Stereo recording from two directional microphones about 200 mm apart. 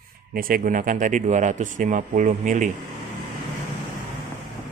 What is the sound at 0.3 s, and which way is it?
Speech, 45° right (ahead or behind).